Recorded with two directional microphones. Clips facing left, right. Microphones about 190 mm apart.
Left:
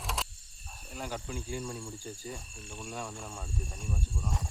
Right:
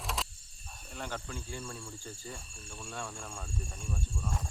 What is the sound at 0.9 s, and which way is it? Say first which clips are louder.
Speech: left 2 dB; 10° left (ahead or behind).